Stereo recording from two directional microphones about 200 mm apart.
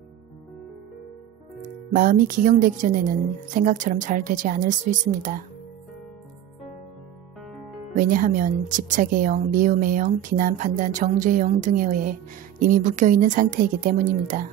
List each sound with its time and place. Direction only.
1.6 s speech: 45° right (ahead or behind)
7.9 s speech: 40° right (ahead or behind)